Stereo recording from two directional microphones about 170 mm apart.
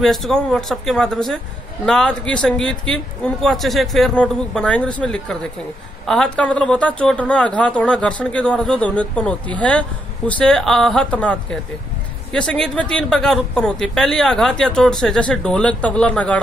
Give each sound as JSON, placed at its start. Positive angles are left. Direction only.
{"t": 0.0, "sound": "speech", "side_deg": 0}